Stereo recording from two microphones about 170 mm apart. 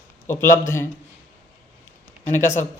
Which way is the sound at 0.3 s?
15° left (ahead or behind).